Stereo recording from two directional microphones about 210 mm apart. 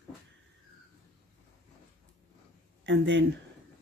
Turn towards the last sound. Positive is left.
turn(degrees=-55)  # may be behind; listen again after turning